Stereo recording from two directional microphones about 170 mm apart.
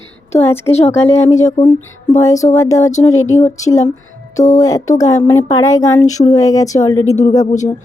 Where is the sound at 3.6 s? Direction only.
20° left (ahead or behind).